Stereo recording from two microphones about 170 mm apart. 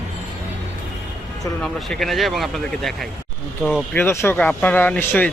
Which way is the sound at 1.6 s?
Centre (ahead or behind).